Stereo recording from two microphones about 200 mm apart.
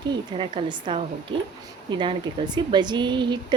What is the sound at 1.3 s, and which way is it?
Speech, 75° right (ahead or behind).